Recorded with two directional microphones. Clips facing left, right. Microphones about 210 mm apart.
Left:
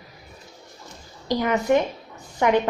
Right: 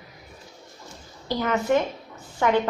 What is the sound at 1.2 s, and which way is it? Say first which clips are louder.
A woman's voice: left 2 dB; 15° left (ahead or behind).